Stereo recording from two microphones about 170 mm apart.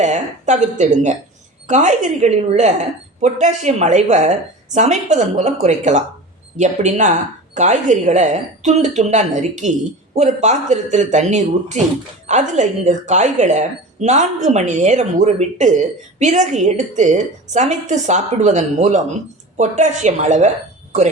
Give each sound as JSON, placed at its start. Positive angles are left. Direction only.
{"t": 0.0, "sound": "a woman's voice", "side_deg": -45}